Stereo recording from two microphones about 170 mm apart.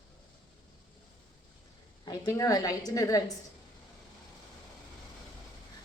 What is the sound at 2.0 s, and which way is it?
A woman's voice, 20° left (ahead or behind).